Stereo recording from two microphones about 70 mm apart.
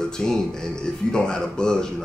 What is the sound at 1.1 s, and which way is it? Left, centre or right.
Speech, centre.